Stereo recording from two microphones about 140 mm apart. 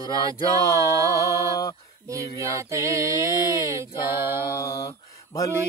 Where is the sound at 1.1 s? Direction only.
20° left (ahead or behind).